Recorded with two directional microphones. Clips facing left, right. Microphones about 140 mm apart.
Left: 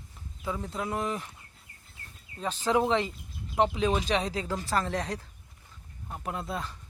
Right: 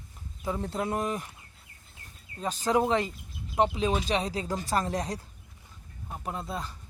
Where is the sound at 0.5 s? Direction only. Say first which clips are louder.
Right 3 dB; 30° right (ahead or behind).